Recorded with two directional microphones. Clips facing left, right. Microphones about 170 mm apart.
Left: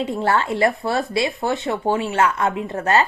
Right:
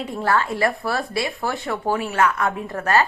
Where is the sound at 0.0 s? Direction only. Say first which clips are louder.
Left 2 dB; 25° left (ahead or behind).